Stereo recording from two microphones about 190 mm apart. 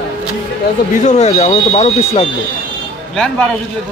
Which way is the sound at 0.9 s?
40° left (ahead or behind).